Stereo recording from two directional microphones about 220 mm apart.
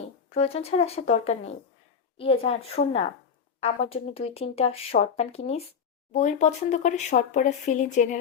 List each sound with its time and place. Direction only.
0.3 s speech: 25° left (ahead or behind)